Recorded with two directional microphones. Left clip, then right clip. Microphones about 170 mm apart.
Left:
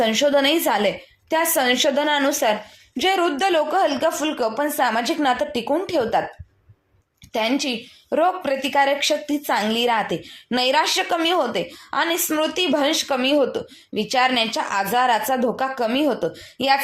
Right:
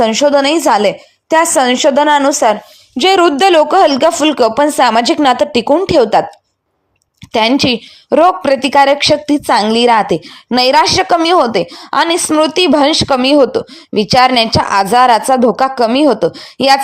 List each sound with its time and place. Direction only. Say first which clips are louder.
0.0 s a woman's voice: right 8 dB; 40° right (ahead or behind)
3.0 s a woman's voice: right 11 dB; 55° right (ahead or behind)
7.3 s a woman's voice: right 11 dB; 55° right (ahead or behind)